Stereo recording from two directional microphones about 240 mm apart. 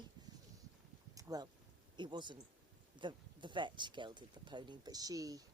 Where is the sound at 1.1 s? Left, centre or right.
Centre.